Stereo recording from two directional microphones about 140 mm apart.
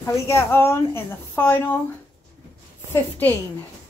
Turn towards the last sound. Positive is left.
turn(degrees=15)  # may be behind; listen again after turning